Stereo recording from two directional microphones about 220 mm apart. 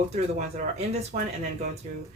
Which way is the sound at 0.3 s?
30° right (ahead or behind).